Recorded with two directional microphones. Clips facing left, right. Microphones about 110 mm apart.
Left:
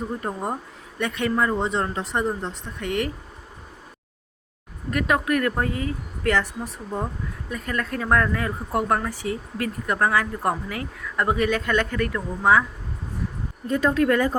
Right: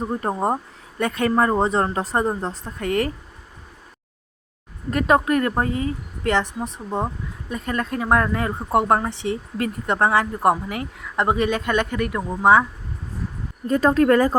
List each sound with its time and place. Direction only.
0.2 s speech: 45° right (ahead or behind)
4.9 s speech: 35° right (ahead or behind)
13.7 s a woman's voice: 40° right (ahead or behind)